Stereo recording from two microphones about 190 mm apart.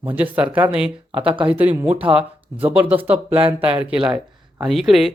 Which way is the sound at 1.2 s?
25° right (ahead or behind).